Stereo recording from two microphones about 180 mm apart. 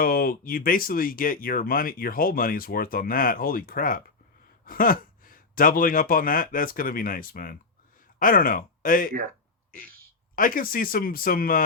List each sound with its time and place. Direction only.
0.0 s speech: 55° left (ahead or behind)
10.3 s speech: 50° left (ahead or behind)